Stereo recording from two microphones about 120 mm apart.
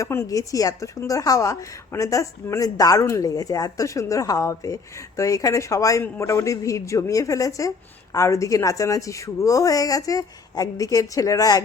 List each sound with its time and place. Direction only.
0.0 s a woman's voice: 25° left (ahead or behind)